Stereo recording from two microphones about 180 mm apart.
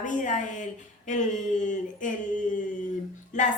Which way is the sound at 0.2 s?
45° left (ahead or behind).